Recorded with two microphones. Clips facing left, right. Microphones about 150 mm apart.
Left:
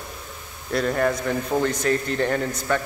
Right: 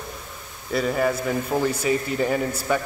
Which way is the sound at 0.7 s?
5° right (ahead or behind).